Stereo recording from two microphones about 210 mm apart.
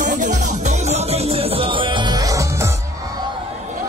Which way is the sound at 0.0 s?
35° right (ahead or behind).